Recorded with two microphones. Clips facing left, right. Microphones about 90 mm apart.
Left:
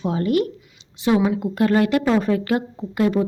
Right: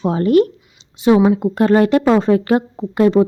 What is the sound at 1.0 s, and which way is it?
Speech, 25° right (ahead or behind).